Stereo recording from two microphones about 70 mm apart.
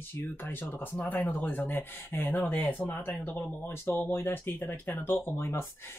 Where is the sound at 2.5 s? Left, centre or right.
Left.